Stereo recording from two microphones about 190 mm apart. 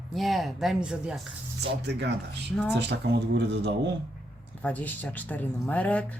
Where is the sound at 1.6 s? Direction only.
60° right (ahead or behind).